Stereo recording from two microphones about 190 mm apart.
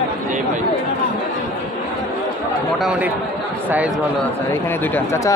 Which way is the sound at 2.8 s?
5° right (ahead or behind).